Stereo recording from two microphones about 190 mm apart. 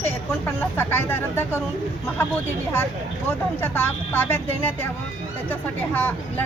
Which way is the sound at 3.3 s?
10° left (ahead or behind).